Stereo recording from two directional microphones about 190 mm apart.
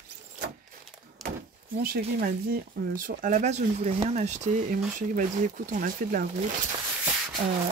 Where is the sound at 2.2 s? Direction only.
50° right (ahead or behind).